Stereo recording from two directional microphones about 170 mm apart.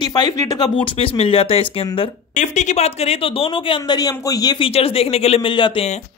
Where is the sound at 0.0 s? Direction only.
25° left (ahead or behind).